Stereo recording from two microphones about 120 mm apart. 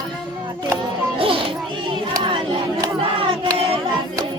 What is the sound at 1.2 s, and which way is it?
Music, 50° right (ahead or behind).